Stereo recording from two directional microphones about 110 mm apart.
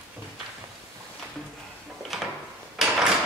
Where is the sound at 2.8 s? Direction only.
5° right (ahead or behind).